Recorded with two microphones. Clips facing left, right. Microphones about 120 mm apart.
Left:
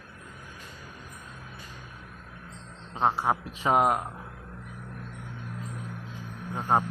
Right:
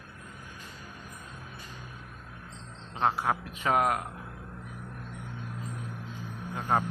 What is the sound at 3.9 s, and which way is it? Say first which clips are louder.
Speech: left 3 dB; 25° left (ahead or behind).